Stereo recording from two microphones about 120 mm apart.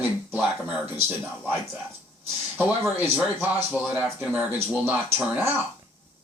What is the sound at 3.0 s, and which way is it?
Speech, 15° right (ahead or behind).